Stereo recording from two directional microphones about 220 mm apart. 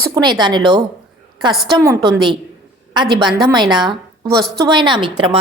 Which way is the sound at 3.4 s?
20° right (ahead or behind).